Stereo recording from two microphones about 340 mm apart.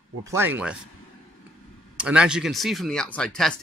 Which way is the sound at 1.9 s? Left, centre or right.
Centre.